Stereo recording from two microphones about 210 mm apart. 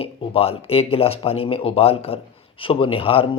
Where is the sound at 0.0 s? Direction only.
30° left (ahead or behind).